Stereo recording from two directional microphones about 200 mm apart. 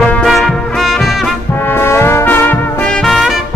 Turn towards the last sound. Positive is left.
turn(degrees=0)  # may be behind; listen again after turning